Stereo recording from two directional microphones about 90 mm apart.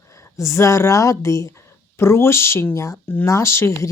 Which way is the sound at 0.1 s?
35° left (ahead or behind).